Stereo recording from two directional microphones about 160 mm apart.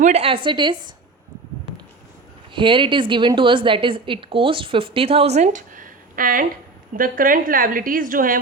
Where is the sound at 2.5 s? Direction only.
30° right (ahead or behind).